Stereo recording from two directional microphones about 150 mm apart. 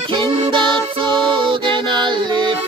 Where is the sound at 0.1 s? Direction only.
35° right (ahead or behind).